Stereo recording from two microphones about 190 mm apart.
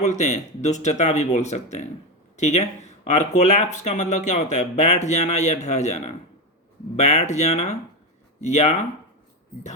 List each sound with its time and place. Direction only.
0.0 s speech: 40° left (ahead or behind)